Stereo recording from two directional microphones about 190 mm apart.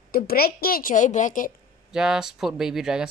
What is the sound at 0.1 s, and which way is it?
A woman's voice, 55° left (ahead or behind).